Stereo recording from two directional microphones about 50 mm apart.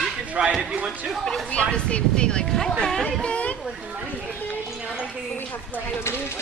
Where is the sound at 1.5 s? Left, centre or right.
Left.